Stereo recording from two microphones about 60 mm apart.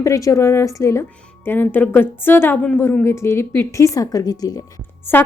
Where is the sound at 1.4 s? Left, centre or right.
Left.